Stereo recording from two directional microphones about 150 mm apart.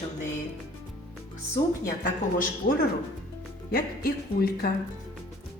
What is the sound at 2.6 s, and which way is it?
Speech, 65° left (ahead or behind).